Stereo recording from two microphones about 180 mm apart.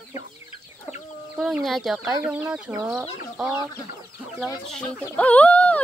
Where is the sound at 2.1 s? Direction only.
15° right (ahead or behind).